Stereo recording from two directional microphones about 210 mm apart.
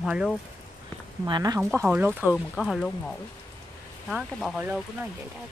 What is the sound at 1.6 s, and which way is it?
Speech, 10° right (ahead or behind).